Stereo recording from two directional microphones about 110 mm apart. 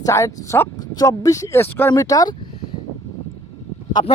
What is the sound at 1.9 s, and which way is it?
Speech, 35° left (ahead or behind).